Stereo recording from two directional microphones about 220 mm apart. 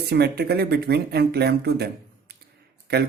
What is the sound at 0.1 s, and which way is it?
Speech, 45° right (ahead or behind).